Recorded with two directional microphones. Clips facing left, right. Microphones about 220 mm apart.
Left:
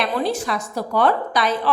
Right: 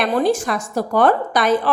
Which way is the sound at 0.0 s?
45° right (ahead or behind).